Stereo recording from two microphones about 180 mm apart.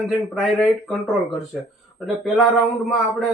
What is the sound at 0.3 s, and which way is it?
Speech, centre (ahead or behind).